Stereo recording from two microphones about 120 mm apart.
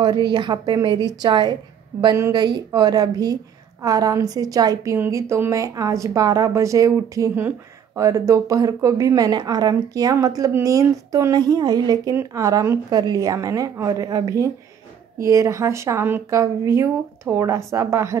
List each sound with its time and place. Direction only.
0.0 s a woman's voice: 40° right (ahead or behind)
4.9 s a woman's voice: 20° right (ahead or behind)